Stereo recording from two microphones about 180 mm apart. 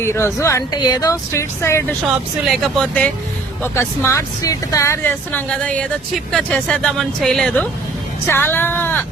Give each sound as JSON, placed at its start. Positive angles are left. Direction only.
{"t": 0.0, "sound": "speech", "side_deg": 15}
{"t": 2.0, "sound": "speech", "side_deg": 0}